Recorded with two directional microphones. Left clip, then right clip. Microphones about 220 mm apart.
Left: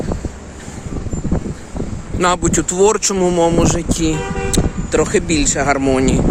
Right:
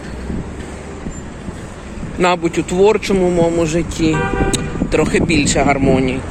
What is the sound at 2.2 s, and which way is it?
Speech, 25° left (ahead or behind).